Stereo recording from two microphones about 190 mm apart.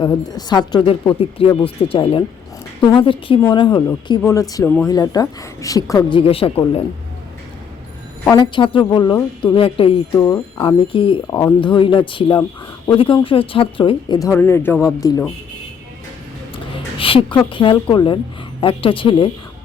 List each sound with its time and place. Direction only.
0.0 s speech: 20° left (ahead or behind)
8.2 s a woman's voice: 15° left (ahead or behind)
8.5 s speech: 25° left (ahead or behind)
10.2 s speech: 15° left (ahead or behind)
11.3 s speech: 15° left (ahead or behind)
11.6 s speech: 25° left (ahead or behind)
17.0 s a sound: 30° left (ahead or behind)
17.3 s speech: 25° left (ahead or behind)